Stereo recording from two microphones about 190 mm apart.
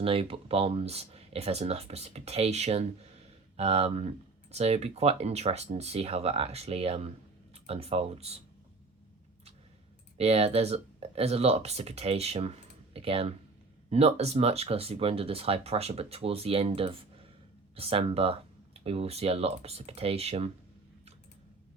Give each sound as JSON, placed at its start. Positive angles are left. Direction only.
{"t": 0.0, "sound": "speech", "side_deg": -30}
{"t": 10.2, "sound": "speech", "side_deg": -35}